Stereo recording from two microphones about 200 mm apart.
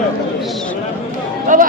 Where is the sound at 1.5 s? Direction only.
40° right (ahead or behind).